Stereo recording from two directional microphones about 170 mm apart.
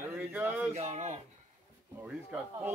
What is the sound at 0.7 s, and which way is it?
Speech, 35° right (ahead or behind).